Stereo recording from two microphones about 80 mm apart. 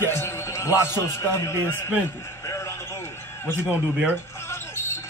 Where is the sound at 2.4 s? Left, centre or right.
Left.